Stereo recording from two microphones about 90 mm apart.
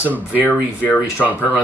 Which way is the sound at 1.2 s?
Centre (ahead or behind).